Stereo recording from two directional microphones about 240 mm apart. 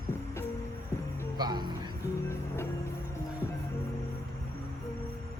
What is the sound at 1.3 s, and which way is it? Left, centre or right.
Music, centre.